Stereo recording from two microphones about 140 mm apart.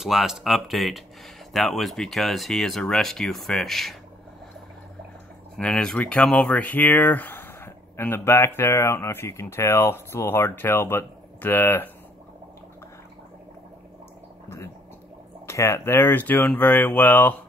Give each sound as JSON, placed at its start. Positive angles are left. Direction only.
{"t": 0.0, "sound": "speech", "side_deg": 0}
{"t": 5.6, "sound": "speech", "side_deg": 5}
{"t": 15.4, "sound": "speech", "side_deg": 20}